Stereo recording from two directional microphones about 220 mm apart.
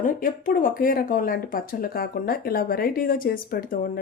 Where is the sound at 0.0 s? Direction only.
35° left (ahead or behind).